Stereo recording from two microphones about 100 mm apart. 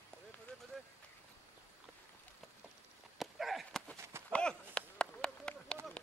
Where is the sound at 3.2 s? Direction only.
Centre (ahead or behind).